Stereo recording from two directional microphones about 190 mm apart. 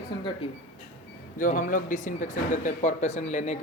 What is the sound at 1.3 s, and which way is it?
Speech, 45° left (ahead or behind).